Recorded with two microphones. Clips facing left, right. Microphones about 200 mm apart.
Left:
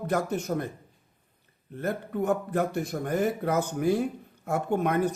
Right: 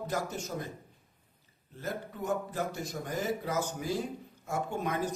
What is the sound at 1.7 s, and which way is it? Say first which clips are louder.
A man's voice: left 8 dB; 60° left (ahead or behind).